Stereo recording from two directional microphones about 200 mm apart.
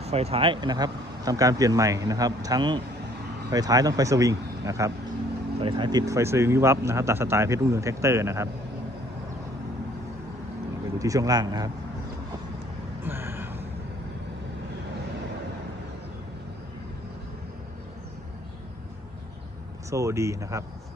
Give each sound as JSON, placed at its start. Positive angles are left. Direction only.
{"t": 0.0, "sound": "speech", "side_deg": -30}
{"t": 11.0, "sound": "speech", "side_deg": -15}
{"t": 13.1, "sound": "vehicle", "side_deg": -10}
{"t": 19.9, "sound": "speech", "side_deg": -15}